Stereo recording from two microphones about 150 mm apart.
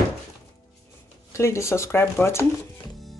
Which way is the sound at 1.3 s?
20° left (ahead or behind).